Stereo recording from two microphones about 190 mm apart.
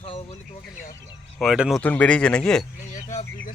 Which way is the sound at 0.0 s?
30° left (ahead or behind).